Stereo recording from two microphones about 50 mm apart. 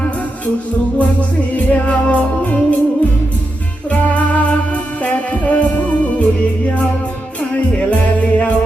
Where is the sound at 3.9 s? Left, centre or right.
Left.